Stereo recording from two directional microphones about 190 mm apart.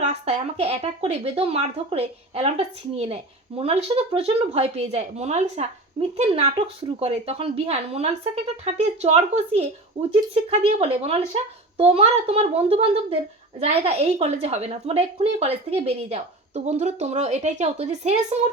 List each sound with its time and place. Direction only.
0.0 s a woman's voice: 35° right (ahead or behind)